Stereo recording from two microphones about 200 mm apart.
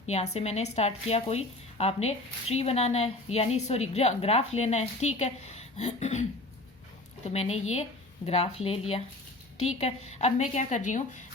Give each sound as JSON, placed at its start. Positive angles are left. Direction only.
{"t": 0.3, "sound": "speech", "side_deg": 35}
{"t": 7.3, "sound": "speech", "side_deg": 30}